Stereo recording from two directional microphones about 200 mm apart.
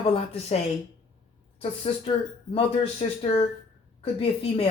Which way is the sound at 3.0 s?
30° left (ahead or behind).